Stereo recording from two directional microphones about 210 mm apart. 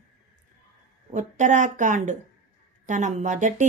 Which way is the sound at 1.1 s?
35° right (ahead or behind).